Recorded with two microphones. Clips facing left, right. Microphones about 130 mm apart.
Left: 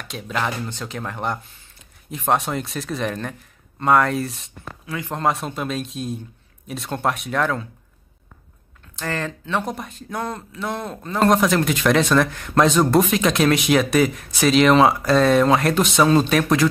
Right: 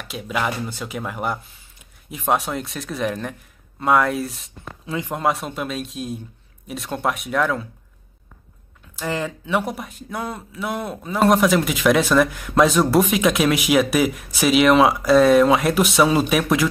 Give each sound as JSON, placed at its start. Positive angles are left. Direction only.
{"t": 0.0, "sound": "speech", "side_deg": -5}
{"t": 4.8, "sound": "speech", "side_deg": -25}
{"t": 5.1, "sound": "speech", "side_deg": 0}
{"t": 8.9, "sound": "speech", "side_deg": -10}